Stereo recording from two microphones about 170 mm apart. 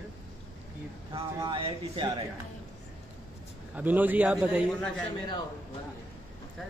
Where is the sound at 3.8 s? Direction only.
10° right (ahead or behind).